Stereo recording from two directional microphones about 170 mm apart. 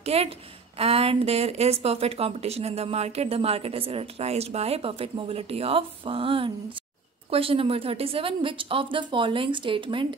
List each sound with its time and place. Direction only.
0.0 s a woman's voice: 35° right (ahead or behind)